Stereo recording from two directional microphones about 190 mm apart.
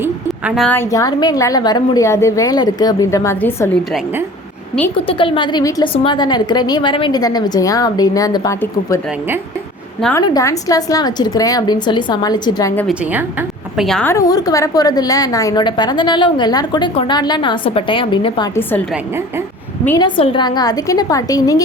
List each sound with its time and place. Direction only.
0.3 s a sound: centre (ahead or behind)
0.7 s a woman's voice: 15° left (ahead or behind)
5.0 s a woman's voice: 30° left (ahead or behind)
10.2 s a woman's voice: 20° left (ahead or behind)
12.9 s a woman's voice: 10° right (ahead or behind)
13.7 s a woman's voice: centre (ahead or behind)
14.1 s a woman's voice: 20° left (ahead or behind)
20.0 s a woman's voice: 25° left (ahead or behind)